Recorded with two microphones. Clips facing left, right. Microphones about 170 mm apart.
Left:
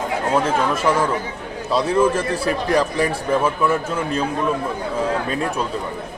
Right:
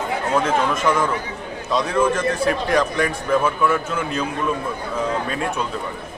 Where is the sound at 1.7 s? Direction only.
30° left (ahead or behind).